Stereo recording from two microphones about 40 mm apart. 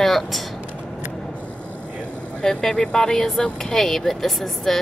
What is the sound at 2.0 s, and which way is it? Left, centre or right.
Vehicle, left.